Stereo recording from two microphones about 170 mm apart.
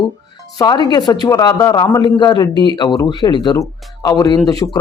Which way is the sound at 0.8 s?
25° left (ahead or behind).